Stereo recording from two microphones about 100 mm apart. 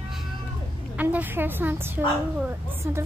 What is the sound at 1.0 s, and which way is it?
A child's voice, 15° right (ahead or behind).